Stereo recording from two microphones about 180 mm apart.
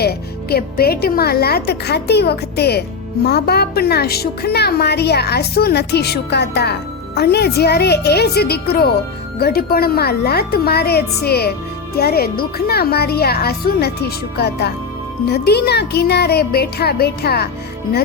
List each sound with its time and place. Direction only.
0.0 s a woman's voice: 60° left (ahead or behind)